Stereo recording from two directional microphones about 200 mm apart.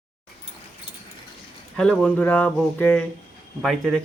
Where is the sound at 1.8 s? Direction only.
5° left (ahead or behind).